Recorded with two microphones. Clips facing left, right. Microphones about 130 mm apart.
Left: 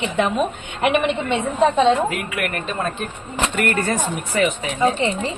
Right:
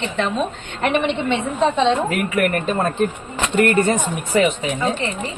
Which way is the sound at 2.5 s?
40° right (ahead or behind).